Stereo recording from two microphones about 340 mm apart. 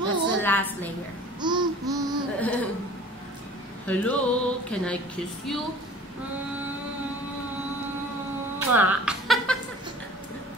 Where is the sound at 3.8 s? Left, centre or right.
Centre.